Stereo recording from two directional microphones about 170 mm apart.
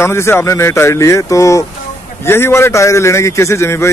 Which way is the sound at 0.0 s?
15° left (ahead or behind).